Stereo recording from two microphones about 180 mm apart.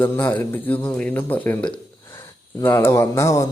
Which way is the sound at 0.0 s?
10° left (ahead or behind).